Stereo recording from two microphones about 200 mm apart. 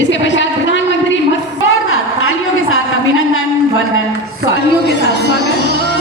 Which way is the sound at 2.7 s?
90° left.